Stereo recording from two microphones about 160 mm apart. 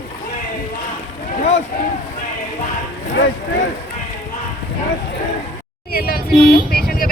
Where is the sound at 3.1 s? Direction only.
90° left.